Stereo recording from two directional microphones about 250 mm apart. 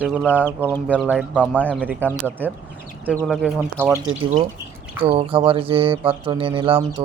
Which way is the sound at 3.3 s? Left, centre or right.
Centre.